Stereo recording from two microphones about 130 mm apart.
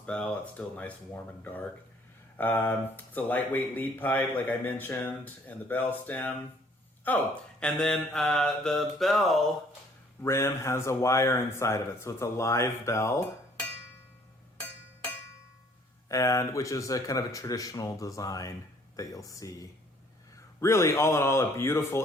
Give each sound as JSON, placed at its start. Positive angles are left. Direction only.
{"t": 0.0, "sound": "speech", "side_deg": 10}
{"t": 7.6, "sound": "mantra", "side_deg": 5}
{"t": 10.2, "sound": "speech", "side_deg": 20}
{"t": 16.0, "sound": "speech", "side_deg": 25}